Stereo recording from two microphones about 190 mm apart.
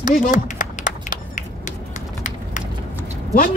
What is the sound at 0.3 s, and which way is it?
Run, 45° left (ahead or behind).